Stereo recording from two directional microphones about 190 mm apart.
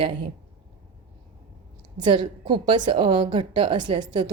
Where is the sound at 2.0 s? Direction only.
25° right (ahead or behind).